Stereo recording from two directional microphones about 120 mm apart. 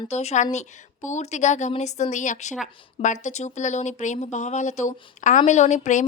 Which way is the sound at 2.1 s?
90° left.